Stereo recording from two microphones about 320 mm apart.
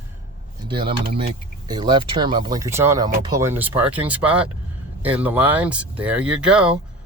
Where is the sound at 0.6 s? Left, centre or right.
Centre.